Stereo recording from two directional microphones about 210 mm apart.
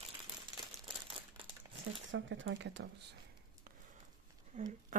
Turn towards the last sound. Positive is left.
turn(degrees=-40)  # may be behind; listen again after turning